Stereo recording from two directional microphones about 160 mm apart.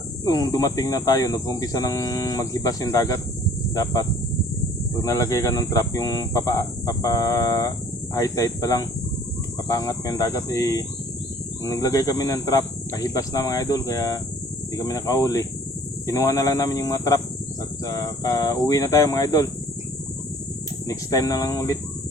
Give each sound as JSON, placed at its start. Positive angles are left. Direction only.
{"t": 0.3, "sound": "speech", "side_deg": 20}
{"t": 5.0, "sound": "speech", "side_deg": 20}
{"t": 20.8, "sound": "speech", "side_deg": 20}